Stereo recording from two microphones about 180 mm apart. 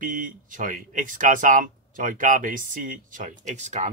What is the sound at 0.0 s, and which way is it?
Speech, 45° right (ahead or behind).